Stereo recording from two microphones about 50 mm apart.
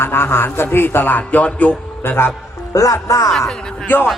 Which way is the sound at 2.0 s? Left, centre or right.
Left.